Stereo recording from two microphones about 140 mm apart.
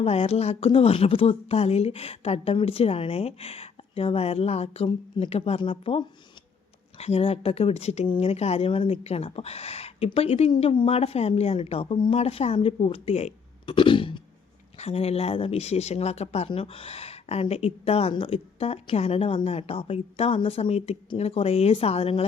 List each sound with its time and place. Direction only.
0.0 s speech: 45° left (ahead or behind)